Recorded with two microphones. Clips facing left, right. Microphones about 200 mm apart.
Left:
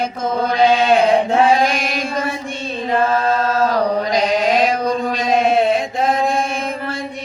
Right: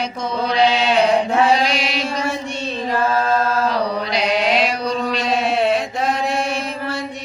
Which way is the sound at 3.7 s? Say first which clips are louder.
Left 4 dB; 45° left (ahead or behind).